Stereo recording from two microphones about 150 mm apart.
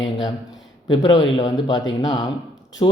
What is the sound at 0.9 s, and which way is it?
Speech, 30° left (ahead or behind).